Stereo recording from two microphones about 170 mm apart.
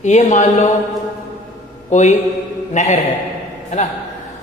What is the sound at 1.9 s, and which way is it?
A man's voice, 45° left (ahead or behind).